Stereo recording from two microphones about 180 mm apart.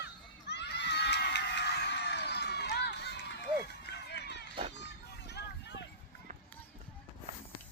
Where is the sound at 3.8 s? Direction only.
70° left (ahead or behind).